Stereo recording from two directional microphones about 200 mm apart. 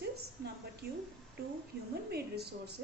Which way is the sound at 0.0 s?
55° right (ahead or behind).